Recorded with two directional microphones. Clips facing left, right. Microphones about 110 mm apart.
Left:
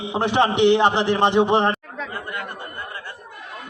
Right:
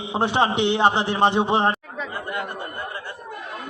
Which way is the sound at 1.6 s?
15° right (ahead or behind).